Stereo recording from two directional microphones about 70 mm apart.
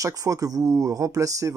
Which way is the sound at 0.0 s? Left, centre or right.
Right.